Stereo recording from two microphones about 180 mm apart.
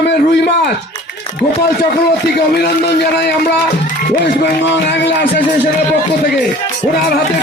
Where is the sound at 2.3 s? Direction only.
65° left (ahead or behind).